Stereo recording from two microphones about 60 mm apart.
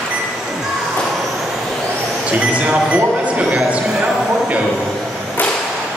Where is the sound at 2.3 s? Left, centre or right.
Right.